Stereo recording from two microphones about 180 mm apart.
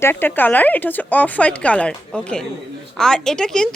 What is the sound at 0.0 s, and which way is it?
A woman's voice, 10° left (ahead or behind).